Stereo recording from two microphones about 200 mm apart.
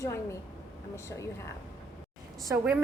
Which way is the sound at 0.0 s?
15° left (ahead or behind).